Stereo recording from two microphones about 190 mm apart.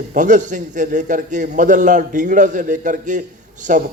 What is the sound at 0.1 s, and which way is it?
A man's voice, 40° right (ahead or behind).